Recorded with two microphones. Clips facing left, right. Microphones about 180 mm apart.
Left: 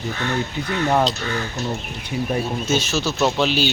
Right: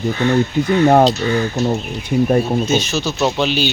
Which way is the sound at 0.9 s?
50° right (ahead or behind).